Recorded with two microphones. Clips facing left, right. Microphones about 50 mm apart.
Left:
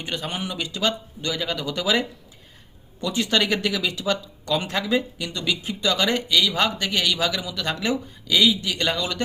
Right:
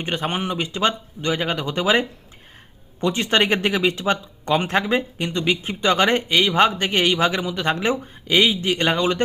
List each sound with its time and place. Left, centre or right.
0.0 s speech: right